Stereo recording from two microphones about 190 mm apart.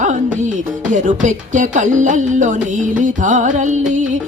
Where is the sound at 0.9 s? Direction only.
40° right (ahead or behind).